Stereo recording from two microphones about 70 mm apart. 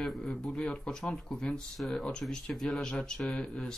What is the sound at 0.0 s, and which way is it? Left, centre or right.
Speech, centre.